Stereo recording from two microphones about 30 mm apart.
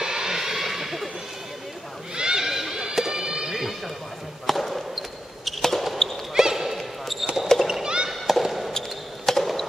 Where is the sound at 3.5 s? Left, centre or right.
Centre.